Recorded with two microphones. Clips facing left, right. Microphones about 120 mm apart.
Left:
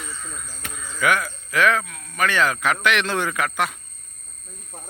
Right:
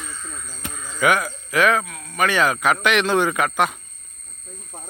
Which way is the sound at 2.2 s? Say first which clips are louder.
Right 2 dB; 15° right (ahead or behind).